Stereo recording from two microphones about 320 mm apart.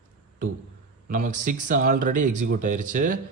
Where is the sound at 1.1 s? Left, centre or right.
Right.